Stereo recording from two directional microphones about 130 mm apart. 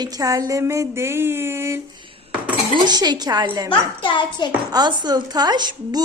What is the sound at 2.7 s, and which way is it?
Speech, 35° right (ahead or behind).